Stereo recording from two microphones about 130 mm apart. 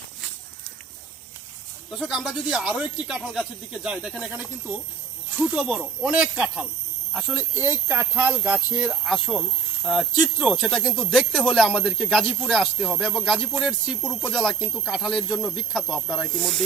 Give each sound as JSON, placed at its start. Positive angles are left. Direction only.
{"t": 1.9, "sound": "speech", "side_deg": -5}
{"t": 5.4, "sound": "speech", "side_deg": -5}
{"t": 8.9, "sound": "speech", "side_deg": 0}